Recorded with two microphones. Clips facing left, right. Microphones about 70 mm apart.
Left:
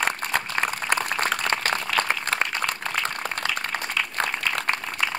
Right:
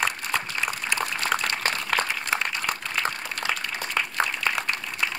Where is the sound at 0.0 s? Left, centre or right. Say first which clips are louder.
Left 2 dB; left.